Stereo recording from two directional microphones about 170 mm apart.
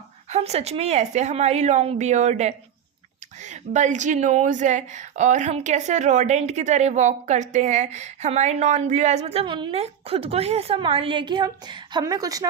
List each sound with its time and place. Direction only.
0.3 s a woman's voice: 40° right (ahead or behind); by 12.5 s 20° right (ahead or behind)